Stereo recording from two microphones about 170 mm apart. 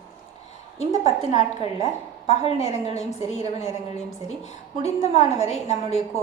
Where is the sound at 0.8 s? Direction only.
40° left (ahead or behind).